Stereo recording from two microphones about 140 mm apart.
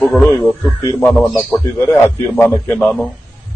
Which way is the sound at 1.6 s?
20° left (ahead or behind).